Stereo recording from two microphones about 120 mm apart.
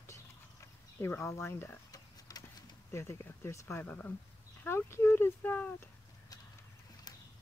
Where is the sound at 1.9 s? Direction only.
30° left (ahead or behind).